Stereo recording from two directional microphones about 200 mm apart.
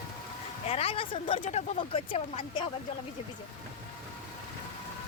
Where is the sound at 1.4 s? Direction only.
35° left (ahead or behind).